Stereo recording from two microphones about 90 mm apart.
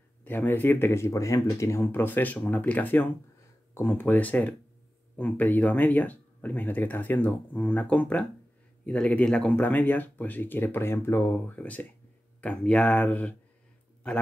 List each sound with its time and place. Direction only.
0.2 s speech: 20° left (ahead or behind)